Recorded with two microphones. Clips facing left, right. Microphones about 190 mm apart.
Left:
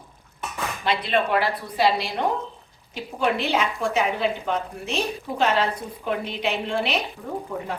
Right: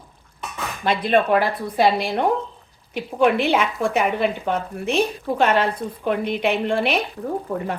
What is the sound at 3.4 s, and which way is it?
A woman's voice, 55° right (ahead or behind).